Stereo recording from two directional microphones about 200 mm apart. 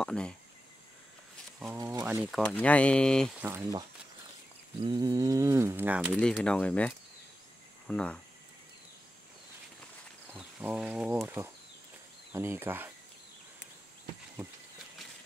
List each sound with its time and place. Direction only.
0.0 s speech: 5° left (ahead or behind)
1.8 s speech: 15° right (ahead or behind)
2.3 s speech: 5° left (ahead or behind)
3.4 s speech: 10° right (ahead or behind)
4.8 s speech: 20° right (ahead or behind)
6.2 s speech: 5° left (ahead or behind)
10.3 s speech: 5° right (ahead or behind)